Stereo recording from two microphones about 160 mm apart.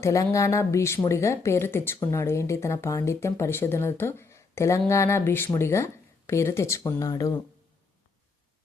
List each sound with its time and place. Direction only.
0.0 s speech: 20° left (ahead or behind)